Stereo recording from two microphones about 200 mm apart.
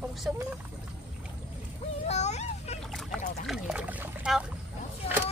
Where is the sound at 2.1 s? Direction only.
35° left (ahead or behind).